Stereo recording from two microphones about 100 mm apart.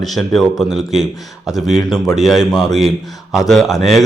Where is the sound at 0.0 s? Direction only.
Centre (ahead or behind).